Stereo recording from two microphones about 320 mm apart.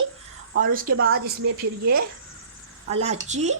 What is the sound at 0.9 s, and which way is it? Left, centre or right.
Speech, right.